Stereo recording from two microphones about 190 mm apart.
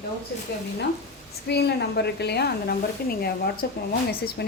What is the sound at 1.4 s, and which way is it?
Speech, 60° left (ahead or behind).